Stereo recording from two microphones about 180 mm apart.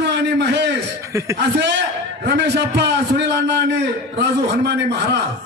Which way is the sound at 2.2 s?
65° right (ahead or behind).